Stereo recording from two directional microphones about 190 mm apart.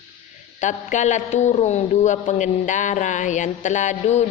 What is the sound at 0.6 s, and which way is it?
A man's voice, 40° left (ahead or behind).